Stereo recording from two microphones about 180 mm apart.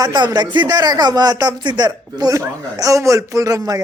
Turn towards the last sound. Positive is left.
turn(degrees=-20)  # may be behind; listen again after turning